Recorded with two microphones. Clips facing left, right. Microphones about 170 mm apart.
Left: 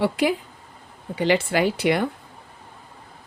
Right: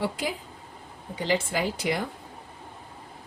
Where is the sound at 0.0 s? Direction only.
75° left (ahead or behind).